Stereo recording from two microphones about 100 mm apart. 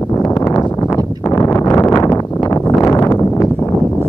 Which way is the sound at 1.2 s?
35° left (ahead or behind).